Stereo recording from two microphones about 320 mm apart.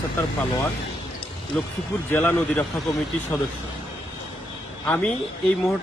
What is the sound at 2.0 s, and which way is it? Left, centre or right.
Speech, centre.